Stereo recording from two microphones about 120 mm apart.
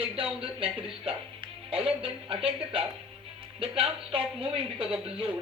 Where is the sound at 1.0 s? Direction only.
50° right (ahead or behind).